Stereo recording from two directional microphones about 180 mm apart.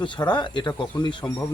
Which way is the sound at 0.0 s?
25° left (ahead or behind).